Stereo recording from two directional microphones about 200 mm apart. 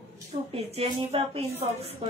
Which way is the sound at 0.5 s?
30° right (ahead or behind).